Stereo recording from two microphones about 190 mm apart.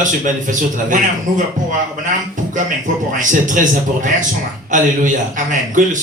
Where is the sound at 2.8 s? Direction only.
45° right (ahead or behind).